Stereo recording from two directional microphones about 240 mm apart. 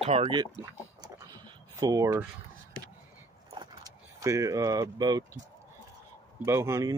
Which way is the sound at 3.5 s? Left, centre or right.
Right.